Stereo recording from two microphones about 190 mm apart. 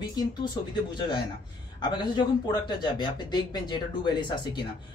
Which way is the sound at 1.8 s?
25° left (ahead or behind).